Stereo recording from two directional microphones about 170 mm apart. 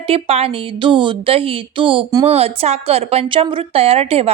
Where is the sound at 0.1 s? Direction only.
35° right (ahead or behind).